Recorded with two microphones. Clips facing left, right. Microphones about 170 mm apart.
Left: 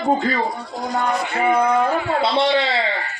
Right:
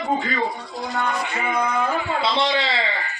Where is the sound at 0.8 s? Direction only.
45° left (ahead or behind).